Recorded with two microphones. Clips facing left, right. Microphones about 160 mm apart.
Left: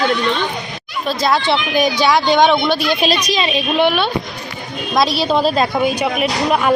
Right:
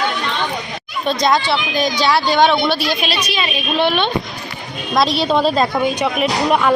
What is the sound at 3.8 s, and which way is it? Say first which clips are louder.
Speech: left 1 dB; 10° left (ahead or behind).